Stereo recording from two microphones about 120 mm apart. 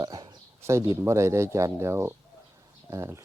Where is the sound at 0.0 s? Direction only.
35° right (ahead or behind).